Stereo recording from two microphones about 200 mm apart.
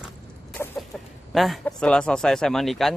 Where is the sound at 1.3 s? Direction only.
Centre (ahead or behind).